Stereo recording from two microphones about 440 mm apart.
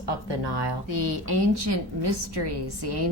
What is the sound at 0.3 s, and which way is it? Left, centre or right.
A woman's voice, right.